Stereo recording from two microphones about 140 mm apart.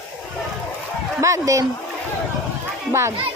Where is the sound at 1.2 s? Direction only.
20° right (ahead or behind).